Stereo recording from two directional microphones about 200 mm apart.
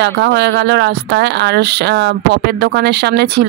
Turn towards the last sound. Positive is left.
turn(degrees=-55)  # may be behind; listen again after turning